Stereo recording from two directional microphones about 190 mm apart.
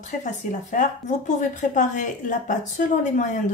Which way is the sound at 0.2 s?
40° left (ahead or behind).